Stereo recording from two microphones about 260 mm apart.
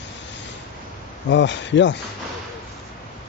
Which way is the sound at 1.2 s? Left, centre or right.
Left.